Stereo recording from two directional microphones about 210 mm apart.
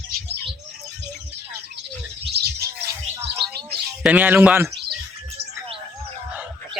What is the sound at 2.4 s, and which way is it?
Chirp, 50° right (ahead or behind).